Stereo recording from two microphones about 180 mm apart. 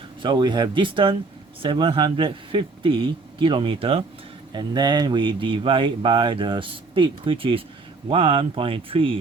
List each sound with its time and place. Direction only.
0.2 s speech: 25° right (ahead or behind)